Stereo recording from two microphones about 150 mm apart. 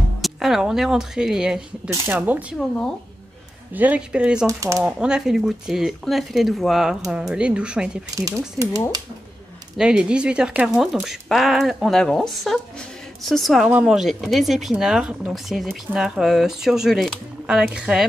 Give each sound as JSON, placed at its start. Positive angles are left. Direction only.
{"t": 0.2, "sound": "speech", "side_deg": 0}
{"t": 3.7, "sound": "speech", "side_deg": -10}
{"t": 4.5, "sound": "speech", "side_deg": -20}
{"t": 4.8, "sound": "speech", "side_deg": -5}
{"t": 9.8, "sound": "speech", "side_deg": -5}